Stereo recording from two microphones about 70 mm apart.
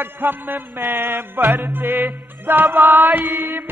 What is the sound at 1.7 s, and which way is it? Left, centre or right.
Music, right.